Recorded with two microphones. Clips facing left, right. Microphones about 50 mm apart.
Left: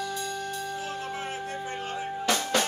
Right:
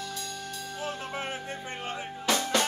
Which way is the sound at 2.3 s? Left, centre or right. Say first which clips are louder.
Even; centre.